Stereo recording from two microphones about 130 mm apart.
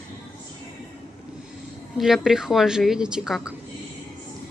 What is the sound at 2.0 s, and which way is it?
A woman's voice, centre (ahead or behind).